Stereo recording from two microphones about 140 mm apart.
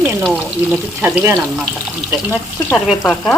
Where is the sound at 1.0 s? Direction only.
20° right (ahead or behind).